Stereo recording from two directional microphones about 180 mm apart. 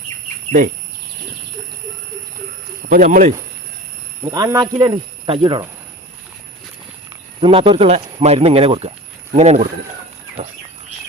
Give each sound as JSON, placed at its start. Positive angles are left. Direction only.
{"t": 2.9, "sound": "speech", "side_deg": -45}
{"t": 4.3, "sound": "speech", "side_deg": -20}
{"t": 7.4, "sound": "speech", "side_deg": -30}